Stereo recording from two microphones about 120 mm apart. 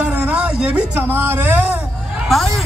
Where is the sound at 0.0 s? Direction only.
10° right (ahead or behind).